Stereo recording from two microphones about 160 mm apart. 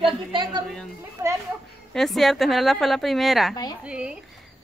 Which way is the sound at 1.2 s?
15° right (ahead or behind).